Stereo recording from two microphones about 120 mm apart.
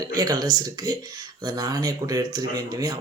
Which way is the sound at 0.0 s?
30° right (ahead or behind).